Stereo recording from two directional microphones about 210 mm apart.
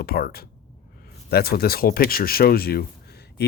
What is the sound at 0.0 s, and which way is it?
Speech, 45° left (ahead or behind).